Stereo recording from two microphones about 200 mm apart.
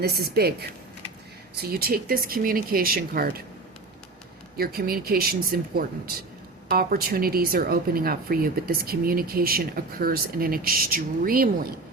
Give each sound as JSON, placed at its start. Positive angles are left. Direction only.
{"t": 0.0, "sound": "speech", "side_deg": -50}
{"t": 1.5, "sound": "speech", "side_deg": -50}
{"t": 4.5, "sound": "speech", "side_deg": -50}